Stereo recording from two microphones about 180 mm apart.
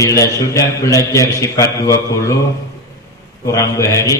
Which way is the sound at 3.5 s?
15° left (ahead or behind).